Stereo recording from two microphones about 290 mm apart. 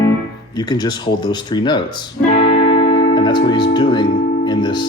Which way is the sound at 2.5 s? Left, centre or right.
Centre.